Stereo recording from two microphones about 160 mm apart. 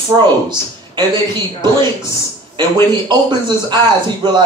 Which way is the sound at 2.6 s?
30° right (ahead or behind).